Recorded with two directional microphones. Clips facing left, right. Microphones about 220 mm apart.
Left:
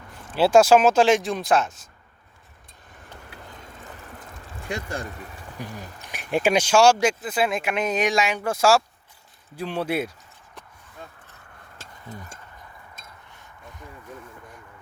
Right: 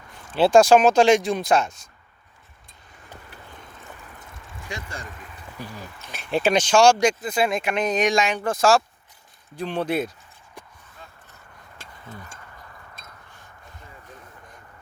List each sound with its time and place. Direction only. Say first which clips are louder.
0.3 s speech: right 1 dB; 5° left (ahead or behind)
5.6 s speech: left 1 dB; 15° left (ahead or behind)